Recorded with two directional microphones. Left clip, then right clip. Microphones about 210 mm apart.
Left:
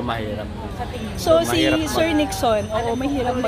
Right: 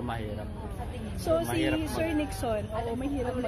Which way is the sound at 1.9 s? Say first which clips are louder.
Left 11 dB; 15° left (ahead or behind).